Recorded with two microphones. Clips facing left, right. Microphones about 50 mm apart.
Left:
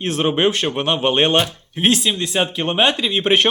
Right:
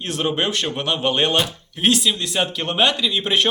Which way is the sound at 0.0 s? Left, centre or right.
Left.